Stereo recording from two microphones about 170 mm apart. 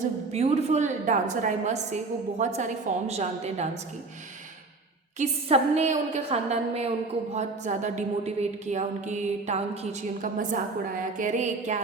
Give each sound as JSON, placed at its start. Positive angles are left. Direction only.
{"t": 0.3, "sound": "a woman's voice", "side_deg": -40}
{"t": 5.1, "sound": "a woman's voice", "side_deg": -40}